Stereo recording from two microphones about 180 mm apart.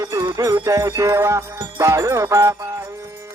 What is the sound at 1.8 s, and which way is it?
Wind chime, 15° right (ahead or behind).